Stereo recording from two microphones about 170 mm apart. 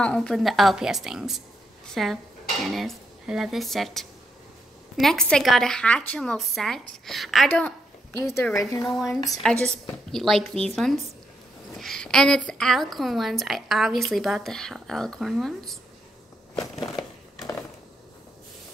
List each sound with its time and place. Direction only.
0.0 s a woman's voice: 5° left (ahead or behind)
8.4 s a woman's voice: 15° left (ahead or behind)
8.8 s a woman's voice: centre (ahead or behind)
16.9 s crumpling: 20° left (ahead or behind)